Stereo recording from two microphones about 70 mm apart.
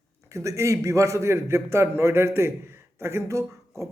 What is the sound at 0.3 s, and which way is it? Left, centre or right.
A man's voice, right.